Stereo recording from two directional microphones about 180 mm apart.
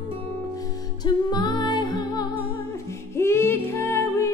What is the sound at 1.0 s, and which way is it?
Music, 25° left (ahead or behind).